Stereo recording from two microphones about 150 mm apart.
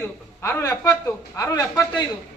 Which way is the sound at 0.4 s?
20° left (ahead or behind).